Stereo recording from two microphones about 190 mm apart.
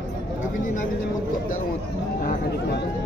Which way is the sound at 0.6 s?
45° left (ahead or behind).